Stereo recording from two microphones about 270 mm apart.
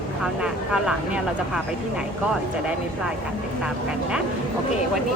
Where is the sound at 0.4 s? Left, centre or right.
Centre.